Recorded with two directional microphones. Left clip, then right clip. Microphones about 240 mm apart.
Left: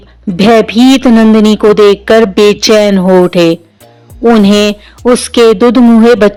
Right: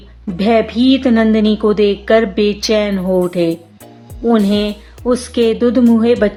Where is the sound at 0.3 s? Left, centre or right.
Left.